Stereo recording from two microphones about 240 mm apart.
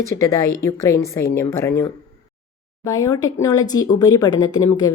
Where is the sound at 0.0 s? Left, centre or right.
Centre.